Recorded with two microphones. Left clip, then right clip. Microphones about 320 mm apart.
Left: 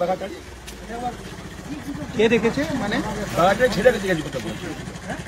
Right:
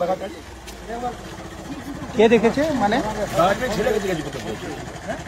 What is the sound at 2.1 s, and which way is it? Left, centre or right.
Speech, right.